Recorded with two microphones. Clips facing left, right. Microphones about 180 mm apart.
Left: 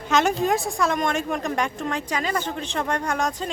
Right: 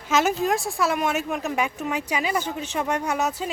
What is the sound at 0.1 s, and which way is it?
A woman's voice, 5° right (ahead or behind).